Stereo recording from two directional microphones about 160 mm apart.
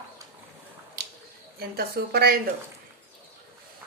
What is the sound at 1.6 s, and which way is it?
Speech, 70° right (ahead or behind).